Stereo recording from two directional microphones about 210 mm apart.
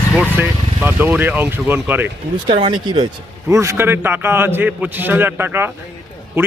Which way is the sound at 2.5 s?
25° right (ahead or behind).